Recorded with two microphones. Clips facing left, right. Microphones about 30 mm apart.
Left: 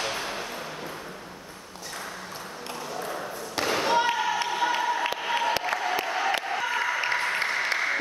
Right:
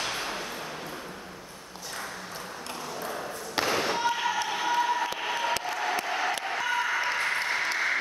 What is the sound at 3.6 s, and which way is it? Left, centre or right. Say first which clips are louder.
Thump: even; centre.